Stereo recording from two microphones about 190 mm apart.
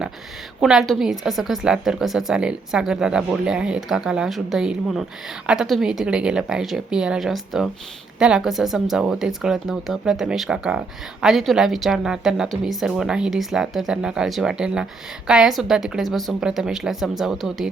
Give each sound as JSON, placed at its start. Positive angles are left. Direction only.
{"t": 0.6, "sound": "speech", "side_deg": 0}